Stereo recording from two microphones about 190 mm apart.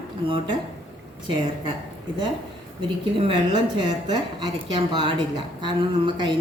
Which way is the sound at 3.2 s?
25° right (ahead or behind).